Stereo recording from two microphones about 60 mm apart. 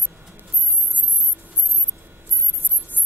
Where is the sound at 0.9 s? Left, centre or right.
Right.